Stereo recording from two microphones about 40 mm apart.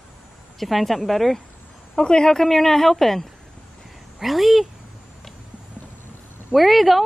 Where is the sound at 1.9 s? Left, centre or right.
Centre.